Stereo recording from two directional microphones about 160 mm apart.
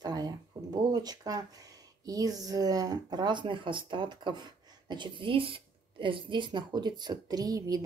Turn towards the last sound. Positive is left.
turn(degrees=-25)  # may be behind; listen again after turning